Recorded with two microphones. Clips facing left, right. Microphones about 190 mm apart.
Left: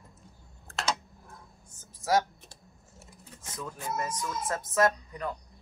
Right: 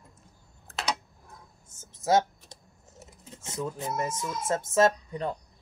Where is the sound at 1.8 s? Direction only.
20° right (ahead or behind).